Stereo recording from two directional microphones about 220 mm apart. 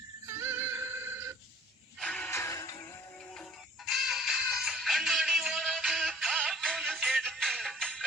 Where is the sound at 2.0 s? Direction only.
5° left (ahead or behind).